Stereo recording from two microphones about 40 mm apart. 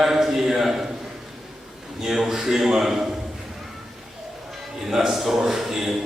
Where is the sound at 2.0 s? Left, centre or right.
Centre.